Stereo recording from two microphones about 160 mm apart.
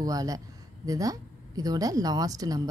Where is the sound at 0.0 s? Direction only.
20° right (ahead or behind).